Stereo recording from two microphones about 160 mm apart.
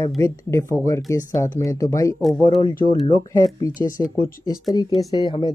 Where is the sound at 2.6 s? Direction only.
30° left (ahead or behind).